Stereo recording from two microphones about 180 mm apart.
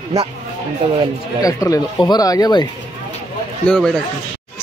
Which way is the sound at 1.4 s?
20° left (ahead or behind).